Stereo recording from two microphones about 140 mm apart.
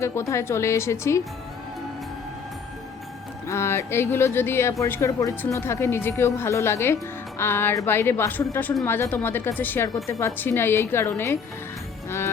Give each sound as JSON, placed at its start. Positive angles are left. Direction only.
{"t": 0.0, "sound": "a woman's voice", "side_deg": 20}
{"t": 3.4, "sound": "speech", "side_deg": 20}